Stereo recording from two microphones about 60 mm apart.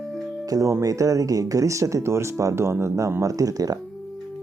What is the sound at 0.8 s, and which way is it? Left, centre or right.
Speech, right.